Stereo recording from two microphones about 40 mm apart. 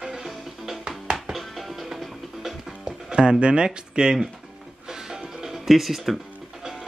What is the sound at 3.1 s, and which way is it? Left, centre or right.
Speech, right.